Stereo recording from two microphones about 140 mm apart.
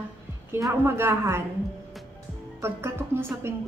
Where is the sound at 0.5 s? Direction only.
20° right (ahead or behind).